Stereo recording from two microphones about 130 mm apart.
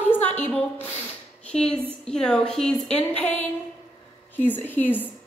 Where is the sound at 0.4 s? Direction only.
10° left (ahead or behind).